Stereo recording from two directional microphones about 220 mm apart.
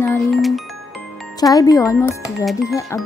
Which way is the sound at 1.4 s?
15° left (ahead or behind).